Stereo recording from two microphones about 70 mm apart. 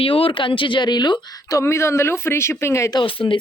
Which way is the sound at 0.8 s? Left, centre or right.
Left.